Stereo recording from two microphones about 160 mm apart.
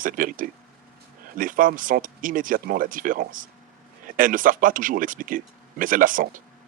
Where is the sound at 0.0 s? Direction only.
60° right (ahead or behind).